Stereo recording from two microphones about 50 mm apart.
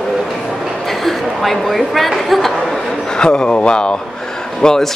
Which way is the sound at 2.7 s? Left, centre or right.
Centre.